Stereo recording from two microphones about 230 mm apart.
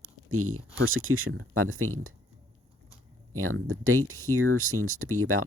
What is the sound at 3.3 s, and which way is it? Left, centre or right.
Speech, right.